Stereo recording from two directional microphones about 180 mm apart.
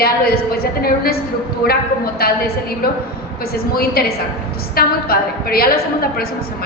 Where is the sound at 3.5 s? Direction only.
55° left (ahead or behind).